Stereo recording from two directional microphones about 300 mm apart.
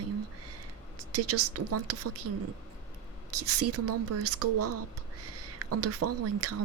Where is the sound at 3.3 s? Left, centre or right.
Right.